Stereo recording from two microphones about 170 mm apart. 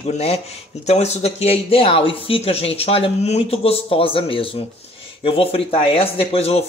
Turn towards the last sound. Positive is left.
turn(degrees=35)  # may be behind; listen again after turning